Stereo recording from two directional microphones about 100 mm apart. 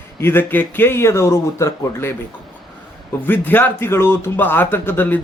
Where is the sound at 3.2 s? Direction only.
20° left (ahead or behind).